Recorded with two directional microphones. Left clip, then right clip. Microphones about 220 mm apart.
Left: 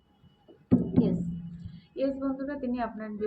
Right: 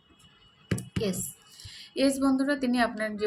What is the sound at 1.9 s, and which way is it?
Speech, 25° right (ahead or behind).